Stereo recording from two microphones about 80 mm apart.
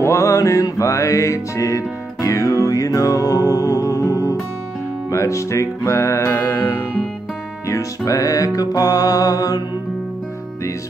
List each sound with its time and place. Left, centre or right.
0.0 s music: left